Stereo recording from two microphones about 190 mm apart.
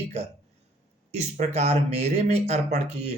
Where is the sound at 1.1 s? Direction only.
35° right (ahead or behind).